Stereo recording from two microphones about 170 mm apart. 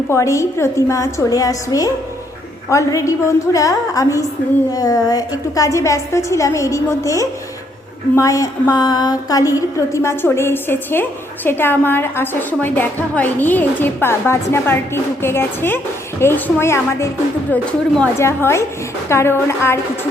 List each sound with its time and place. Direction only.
0.1 s a woman's voice: 20° left (ahead or behind)